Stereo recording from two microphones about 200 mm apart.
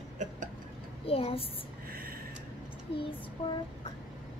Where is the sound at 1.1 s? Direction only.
30° left (ahead or behind).